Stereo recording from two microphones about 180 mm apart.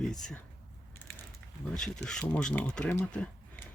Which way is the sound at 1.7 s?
5° left (ahead or behind).